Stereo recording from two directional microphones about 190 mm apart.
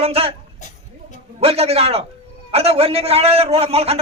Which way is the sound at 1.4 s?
30° right (ahead or behind).